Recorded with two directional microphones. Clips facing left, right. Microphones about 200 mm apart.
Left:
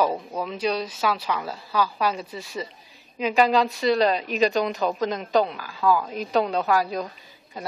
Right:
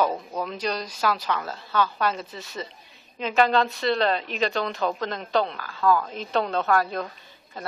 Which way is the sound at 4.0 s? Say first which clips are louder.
Left 3 dB; 10° left (ahead or behind).